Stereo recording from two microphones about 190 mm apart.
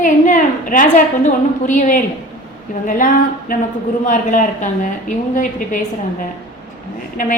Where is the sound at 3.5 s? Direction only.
45° left (ahead or behind).